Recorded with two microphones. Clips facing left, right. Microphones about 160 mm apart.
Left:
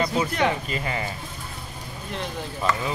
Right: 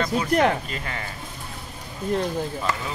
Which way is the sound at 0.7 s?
5° left (ahead or behind).